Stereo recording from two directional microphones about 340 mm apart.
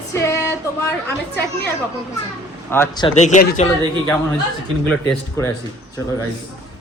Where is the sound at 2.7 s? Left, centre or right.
Centre.